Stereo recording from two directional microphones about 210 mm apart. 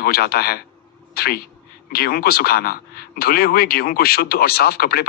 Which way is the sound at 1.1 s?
45° left (ahead or behind).